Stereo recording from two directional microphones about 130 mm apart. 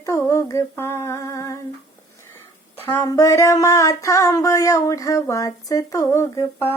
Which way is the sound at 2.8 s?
15° left (ahead or behind).